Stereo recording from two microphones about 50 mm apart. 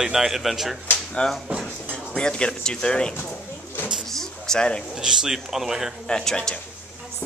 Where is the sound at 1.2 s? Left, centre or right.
Centre.